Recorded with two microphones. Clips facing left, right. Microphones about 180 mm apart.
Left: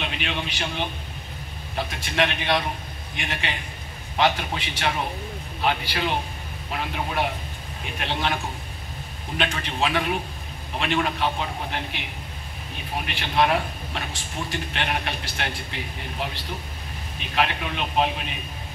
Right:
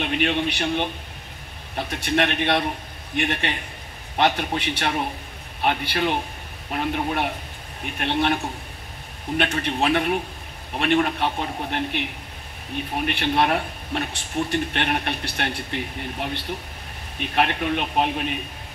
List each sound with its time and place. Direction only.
0.0 s a man's voice: 55° right (ahead or behind)
9.4 s a man's voice: 55° right (ahead or behind)
13.0 s a man's voice: 55° right (ahead or behind)